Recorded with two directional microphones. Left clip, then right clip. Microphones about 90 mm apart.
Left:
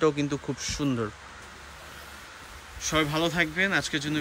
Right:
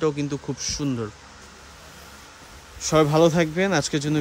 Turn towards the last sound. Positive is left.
turn(degrees=-90)